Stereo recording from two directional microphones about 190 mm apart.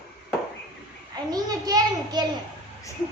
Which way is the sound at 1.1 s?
20° right (ahead or behind).